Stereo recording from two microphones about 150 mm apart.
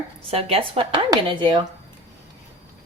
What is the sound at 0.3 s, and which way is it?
Speech, 40° right (ahead or behind).